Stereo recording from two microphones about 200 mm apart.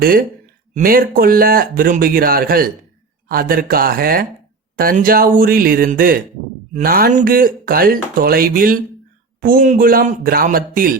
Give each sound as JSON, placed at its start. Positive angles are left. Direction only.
{"t": 0.0, "sound": "speech", "side_deg": -45}